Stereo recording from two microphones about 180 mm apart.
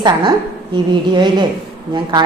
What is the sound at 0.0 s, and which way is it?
A woman's voice, 25° right (ahead or behind).